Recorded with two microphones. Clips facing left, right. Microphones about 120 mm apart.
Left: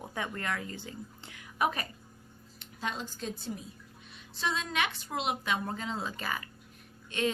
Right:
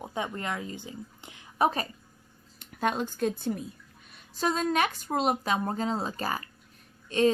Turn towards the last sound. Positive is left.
turn(degrees=-35)  # may be behind; listen again after turning